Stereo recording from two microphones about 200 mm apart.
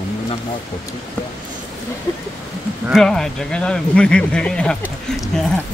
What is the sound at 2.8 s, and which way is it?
Speech, centre (ahead or behind).